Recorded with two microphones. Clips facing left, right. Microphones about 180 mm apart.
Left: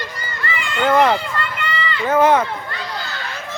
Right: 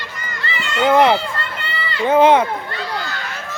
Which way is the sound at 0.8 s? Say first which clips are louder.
Right 2 dB; 10° right (ahead or behind).